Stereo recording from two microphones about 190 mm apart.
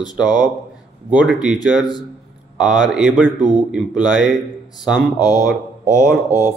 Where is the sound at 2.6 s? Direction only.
5° right (ahead or behind).